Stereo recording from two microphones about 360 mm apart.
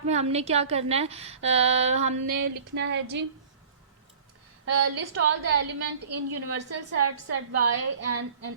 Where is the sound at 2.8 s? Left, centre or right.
Right.